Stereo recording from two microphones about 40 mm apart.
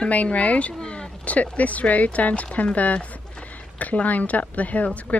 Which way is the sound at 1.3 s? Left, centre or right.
Left.